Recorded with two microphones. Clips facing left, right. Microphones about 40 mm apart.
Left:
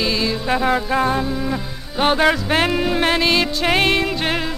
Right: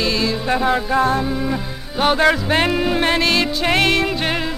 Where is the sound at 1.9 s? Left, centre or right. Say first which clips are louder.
Right 1 dB; centre.